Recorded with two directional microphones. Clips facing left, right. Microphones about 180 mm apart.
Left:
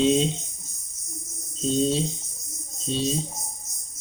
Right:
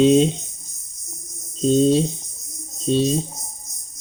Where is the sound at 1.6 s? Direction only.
60° right (ahead or behind).